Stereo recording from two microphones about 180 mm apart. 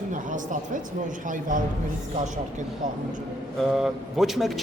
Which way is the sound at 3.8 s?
Centre (ahead or behind).